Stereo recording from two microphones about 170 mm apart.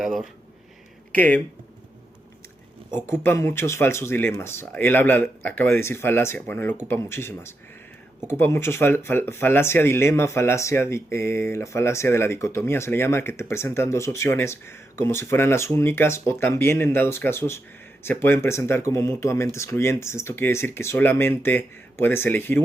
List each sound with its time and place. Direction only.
0.0 s speech: centre (ahead or behind)
1.1 s speech: 10° left (ahead or behind)
2.9 s speech: 15° left (ahead or behind)